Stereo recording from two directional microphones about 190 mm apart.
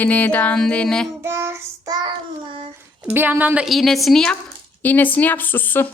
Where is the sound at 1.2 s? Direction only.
15° right (ahead or behind).